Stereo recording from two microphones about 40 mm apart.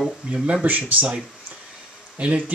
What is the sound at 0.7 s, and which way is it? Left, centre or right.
Speech, right.